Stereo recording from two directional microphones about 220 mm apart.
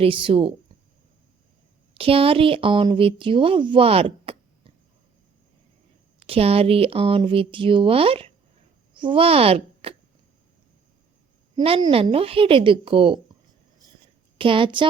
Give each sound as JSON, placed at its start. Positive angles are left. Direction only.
{"t": 0.0, "sound": "speech", "side_deg": -25}
{"t": 1.9, "sound": "speech", "side_deg": -25}
{"t": 6.2, "sound": "speech", "side_deg": -25}
{"t": 11.5, "sound": "speech", "side_deg": -20}
{"t": 14.3, "sound": "speech", "side_deg": -25}